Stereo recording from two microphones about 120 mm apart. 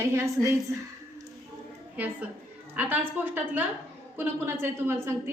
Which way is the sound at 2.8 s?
15° right (ahead or behind).